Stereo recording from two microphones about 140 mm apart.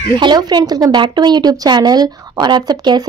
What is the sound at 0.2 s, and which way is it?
A woman's voice, 30° right (ahead or behind).